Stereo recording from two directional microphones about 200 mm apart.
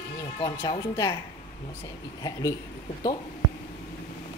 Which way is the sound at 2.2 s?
20° left (ahead or behind).